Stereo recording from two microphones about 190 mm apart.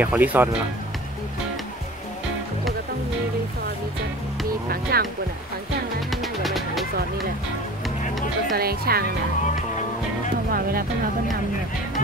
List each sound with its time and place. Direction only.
0.0 s speech: 10° right (ahead or behind)
4.9 s speech: 55° right (ahead or behind)
6.0 s music: centre (ahead or behind)
8.5 s speech: 55° right (ahead or behind)
10.5 s speech: 50° right (ahead or behind)